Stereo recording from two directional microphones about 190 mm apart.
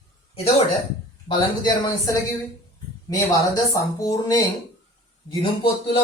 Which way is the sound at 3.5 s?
20° left (ahead or behind).